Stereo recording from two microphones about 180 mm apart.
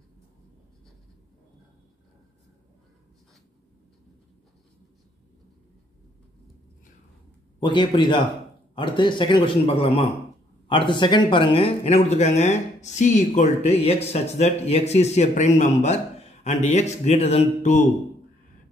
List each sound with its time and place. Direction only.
7.6 s a man's voice: 25° left (ahead or behind)